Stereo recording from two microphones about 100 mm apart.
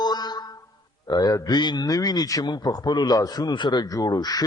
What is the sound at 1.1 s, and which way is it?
A man's voice, 40° left (ahead or behind).